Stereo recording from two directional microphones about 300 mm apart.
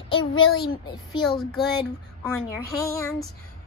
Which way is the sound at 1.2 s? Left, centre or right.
Centre.